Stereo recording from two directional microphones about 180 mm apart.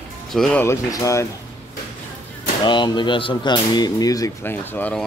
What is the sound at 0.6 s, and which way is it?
Speech, 15° left (ahead or behind).